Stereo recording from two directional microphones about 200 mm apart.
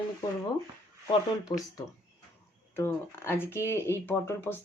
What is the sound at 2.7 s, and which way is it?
Speech, 10° left (ahead or behind).